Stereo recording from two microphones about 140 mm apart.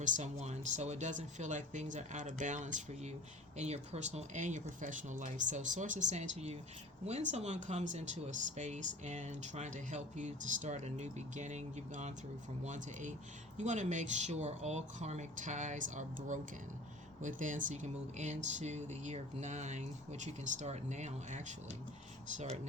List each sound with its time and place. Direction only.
0.0 s speech: 55° right (ahead or behind)